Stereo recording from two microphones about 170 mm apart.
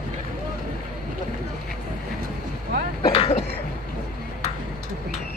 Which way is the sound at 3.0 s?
35° left (ahead or behind).